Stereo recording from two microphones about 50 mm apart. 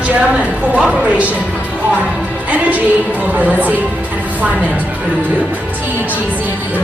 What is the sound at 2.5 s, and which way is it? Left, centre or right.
A woman's voice, right.